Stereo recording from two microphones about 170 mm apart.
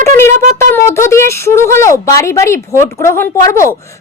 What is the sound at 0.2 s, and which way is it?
Speech, 15° left (ahead or behind).